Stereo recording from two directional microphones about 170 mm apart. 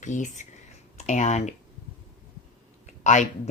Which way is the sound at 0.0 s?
45° left (ahead or behind).